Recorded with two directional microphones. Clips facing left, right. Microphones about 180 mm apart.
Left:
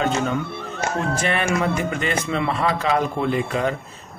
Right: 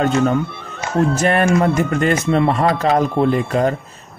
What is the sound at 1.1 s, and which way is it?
A man's voice, 45° right (ahead or behind).